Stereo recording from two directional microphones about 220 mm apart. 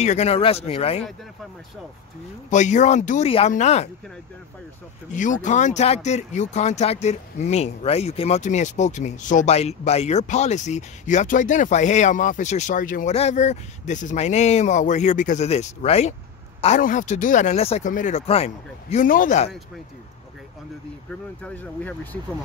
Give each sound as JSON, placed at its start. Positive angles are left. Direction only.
{"t": 0.0, "sound": "speech", "side_deg": 30}
{"t": 2.5, "sound": "speech", "side_deg": 35}
{"t": 5.1, "sound": "speech", "side_deg": 35}
{"t": 21.1, "sound": "speech", "side_deg": 5}